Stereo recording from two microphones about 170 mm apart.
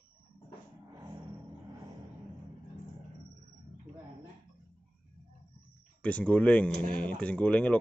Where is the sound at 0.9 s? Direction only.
20° right (ahead or behind).